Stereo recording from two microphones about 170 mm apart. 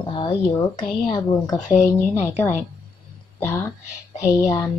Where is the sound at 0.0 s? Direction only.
25° left (ahead or behind).